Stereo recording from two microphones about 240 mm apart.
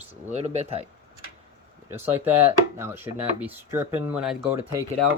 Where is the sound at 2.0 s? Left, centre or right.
Centre.